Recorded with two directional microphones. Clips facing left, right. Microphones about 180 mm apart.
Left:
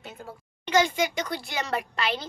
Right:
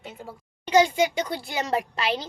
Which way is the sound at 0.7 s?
30° right (ahead or behind).